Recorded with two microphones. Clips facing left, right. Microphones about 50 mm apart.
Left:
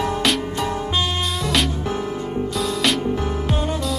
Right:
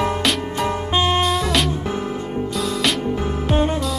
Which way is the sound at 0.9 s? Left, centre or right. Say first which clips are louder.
Right 9 dB; right.